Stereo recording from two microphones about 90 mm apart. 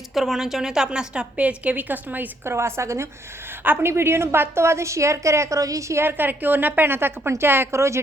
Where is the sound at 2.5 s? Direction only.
30° right (ahead or behind).